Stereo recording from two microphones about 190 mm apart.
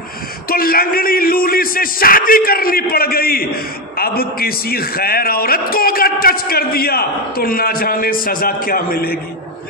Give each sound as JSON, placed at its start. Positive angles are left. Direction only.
{"t": 0.5, "sound": "speech", "side_deg": 50}